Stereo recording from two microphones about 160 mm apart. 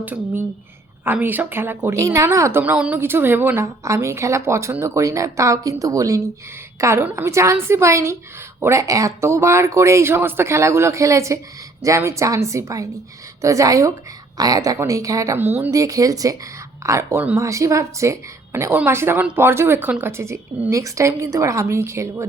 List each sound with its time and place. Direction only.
0.0 s a woman's voice: 10° right (ahead or behind)